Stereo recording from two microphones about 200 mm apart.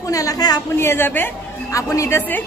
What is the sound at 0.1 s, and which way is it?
A woman's voice, 20° left (ahead or behind).